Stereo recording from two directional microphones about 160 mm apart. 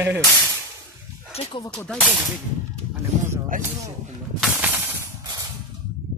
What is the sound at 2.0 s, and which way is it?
Speech, 10° right (ahead or behind).